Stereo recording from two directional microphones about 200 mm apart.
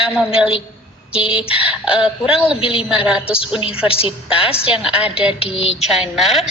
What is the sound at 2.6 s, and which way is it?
Speech, 25° left (ahead or behind).